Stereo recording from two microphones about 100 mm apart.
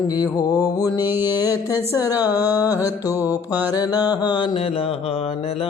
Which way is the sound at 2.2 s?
15° right (ahead or behind).